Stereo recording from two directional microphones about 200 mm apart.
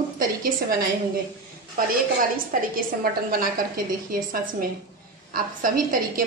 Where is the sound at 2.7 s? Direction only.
45° right (ahead or behind).